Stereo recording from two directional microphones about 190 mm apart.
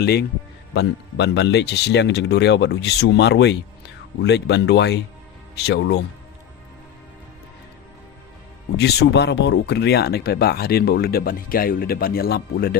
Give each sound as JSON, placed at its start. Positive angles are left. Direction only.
{"t": 0.0, "sound": "speech", "side_deg": 55}
{"t": 8.8, "sound": "speech", "side_deg": 60}